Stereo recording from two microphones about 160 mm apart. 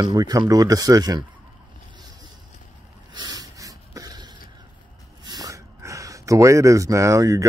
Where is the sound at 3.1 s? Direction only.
25° right (ahead or behind).